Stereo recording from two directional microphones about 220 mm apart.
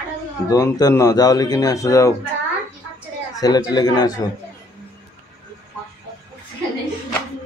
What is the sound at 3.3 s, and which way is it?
Speech, 15° left (ahead or behind).